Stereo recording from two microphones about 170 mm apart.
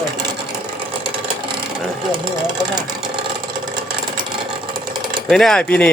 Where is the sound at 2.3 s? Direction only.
25° right (ahead or behind).